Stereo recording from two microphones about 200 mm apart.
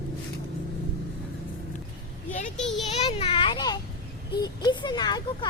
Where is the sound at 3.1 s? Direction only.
25° left (ahead or behind).